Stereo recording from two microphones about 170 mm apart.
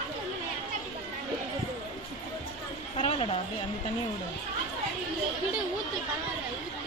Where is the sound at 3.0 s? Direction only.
35° left (ahead or behind).